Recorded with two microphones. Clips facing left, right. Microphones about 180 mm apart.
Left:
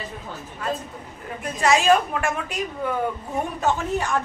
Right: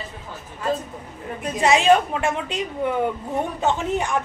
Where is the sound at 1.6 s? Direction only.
25° right (ahead or behind).